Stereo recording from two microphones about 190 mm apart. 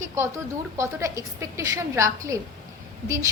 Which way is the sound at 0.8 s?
15° right (ahead or behind).